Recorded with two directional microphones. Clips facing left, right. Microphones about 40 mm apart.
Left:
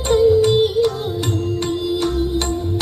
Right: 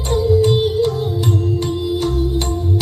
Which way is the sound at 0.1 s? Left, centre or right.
Left.